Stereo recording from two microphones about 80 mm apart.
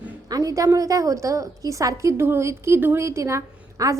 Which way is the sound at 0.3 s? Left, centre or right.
Right.